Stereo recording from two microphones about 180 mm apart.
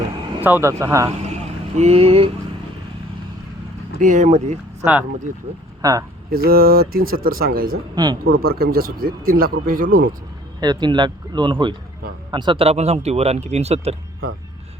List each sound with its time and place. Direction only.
0.4 s speech: 15° right (ahead or behind)
1.7 s speech: 35° right (ahead or behind)
4.0 s speech: 45° right (ahead or behind)
5.8 s speech: 20° right (ahead or behind)
6.3 s speech: 55° right (ahead or behind)
7.9 s speech: 25° right (ahead or behind)
8.2 s speech: 55° right (ahead or behind)
10.6 s speech: 25° right (ahead or behind)